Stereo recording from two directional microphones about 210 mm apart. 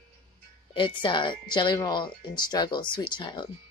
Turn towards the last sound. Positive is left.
turn(degrees=20)  # may be behind; listen again after turning